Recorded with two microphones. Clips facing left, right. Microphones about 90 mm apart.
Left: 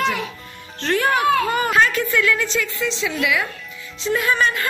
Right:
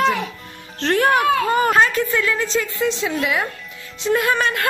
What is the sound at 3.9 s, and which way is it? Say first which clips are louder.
Music: right 1 dB; 50° right (ahead or behind).